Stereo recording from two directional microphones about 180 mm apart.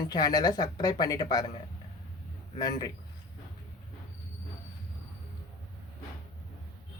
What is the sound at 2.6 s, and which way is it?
Speech, 20° left (ahead or behind).